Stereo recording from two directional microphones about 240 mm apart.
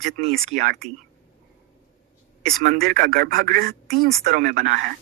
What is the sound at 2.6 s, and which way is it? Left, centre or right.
Speech, right.